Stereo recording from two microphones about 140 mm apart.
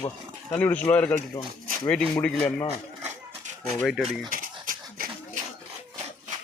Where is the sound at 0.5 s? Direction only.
10° left (ahead or behind).